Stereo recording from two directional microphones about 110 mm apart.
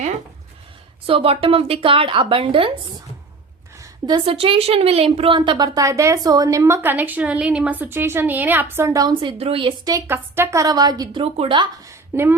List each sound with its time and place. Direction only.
1.0 s a woman's voice: 55° right (ahead or behind)
3.8 s a sound: 40° right (ahead or behind)
4.3 s a woman's voice: 60° right (ahead or behind)
5.6 s a woman's voice: 30° right (ahead or behind)
9.4 s a woman's voice: 55° right (ahead or behind)
10.1 s a woman's voice: 20° right (ahead or behind)
11.2 s speech: 55° right (ahead or behind)
11.9 s a sound: 20° right (ahead or behind)